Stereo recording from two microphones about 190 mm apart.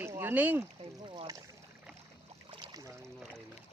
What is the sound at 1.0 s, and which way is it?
Speech, 25° right (ahead or behind).